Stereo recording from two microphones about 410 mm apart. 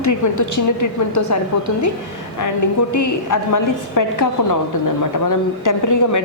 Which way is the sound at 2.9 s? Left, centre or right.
Left.